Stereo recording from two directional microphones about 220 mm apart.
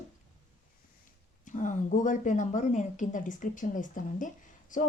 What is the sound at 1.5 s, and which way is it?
A woman's voice, 35° left (ahead or behind).